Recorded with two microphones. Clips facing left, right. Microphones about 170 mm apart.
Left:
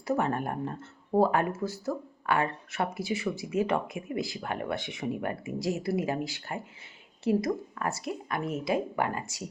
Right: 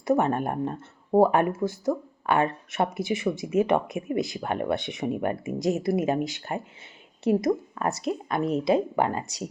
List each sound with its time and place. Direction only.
0.0 s speech: 20° right (ahead or behind)